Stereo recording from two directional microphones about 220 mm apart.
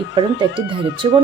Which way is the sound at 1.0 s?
25° right (ahead or behind).